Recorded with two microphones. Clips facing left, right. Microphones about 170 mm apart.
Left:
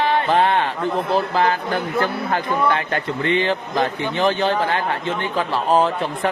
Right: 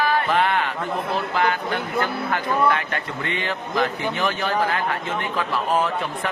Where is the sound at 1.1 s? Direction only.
35° left (ahead or behind).